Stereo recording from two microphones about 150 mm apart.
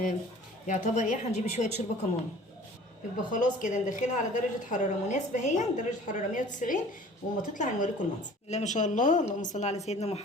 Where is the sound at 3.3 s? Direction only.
55° left (ahead or behind).